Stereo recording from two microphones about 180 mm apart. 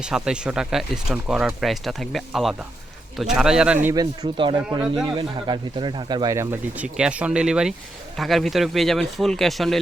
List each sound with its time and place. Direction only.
0.0 s speech: 5° right (ahead or behind)
3.8 s speech: 20° right (ahead or behind); by 9.8 s centre (ahead or behind)